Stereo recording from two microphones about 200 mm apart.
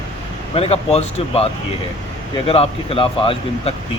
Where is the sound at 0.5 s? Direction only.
30° left (ahead or behind).